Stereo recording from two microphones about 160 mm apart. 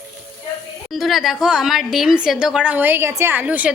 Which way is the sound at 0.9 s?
Centre (ahead or behind).